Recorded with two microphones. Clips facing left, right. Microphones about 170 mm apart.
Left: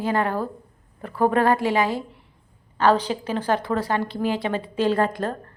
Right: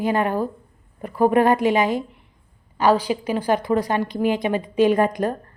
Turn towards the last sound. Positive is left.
turn(degrees=-15)  # may be behind; listen again after turning